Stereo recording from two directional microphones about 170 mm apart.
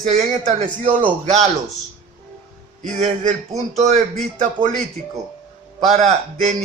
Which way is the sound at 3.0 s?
40° right (ahead or behind).